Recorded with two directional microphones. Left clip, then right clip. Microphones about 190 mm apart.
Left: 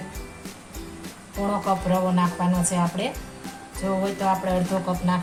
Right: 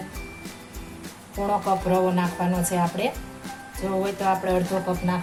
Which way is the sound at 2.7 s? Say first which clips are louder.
Right 2 dB; 15° right (ahead or behind).